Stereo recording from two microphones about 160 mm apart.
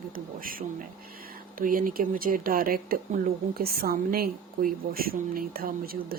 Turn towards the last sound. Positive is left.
turn(degrees=-65)  # may be behind; listen again after turning